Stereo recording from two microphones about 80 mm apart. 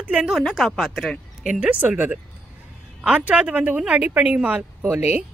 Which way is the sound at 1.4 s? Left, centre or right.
Centre.